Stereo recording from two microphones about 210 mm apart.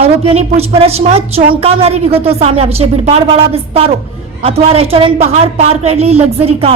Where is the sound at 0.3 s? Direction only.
30° right (ahead or behind).